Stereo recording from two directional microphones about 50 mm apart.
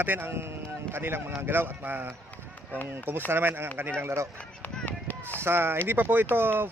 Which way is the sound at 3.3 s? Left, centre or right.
Right.